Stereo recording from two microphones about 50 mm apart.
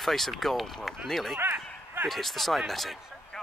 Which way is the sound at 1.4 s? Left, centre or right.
Right.